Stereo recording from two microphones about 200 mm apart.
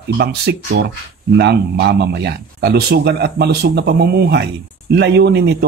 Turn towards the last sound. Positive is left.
turn(degrees=-55)  # may be behind; listen again after turning